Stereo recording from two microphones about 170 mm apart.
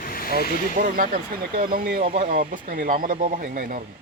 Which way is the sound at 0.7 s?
50° right (ahead or behind).